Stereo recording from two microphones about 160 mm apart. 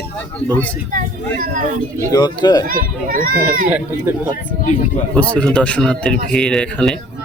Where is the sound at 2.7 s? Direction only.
60° right (ahead or behind).